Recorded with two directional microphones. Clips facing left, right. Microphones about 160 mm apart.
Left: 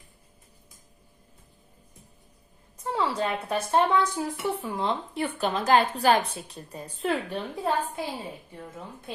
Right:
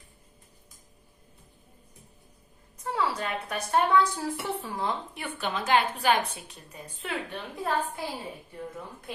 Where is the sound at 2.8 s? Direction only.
25° left (ahead or behind).